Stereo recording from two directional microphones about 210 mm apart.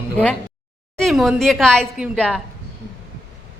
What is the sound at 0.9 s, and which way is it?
A woman's voice, centre (ahead or behind).